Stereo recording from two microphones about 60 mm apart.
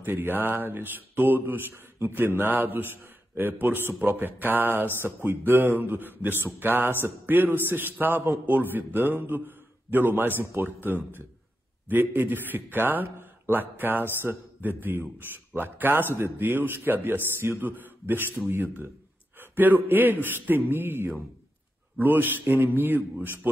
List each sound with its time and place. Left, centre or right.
0.0 s a man's voice: right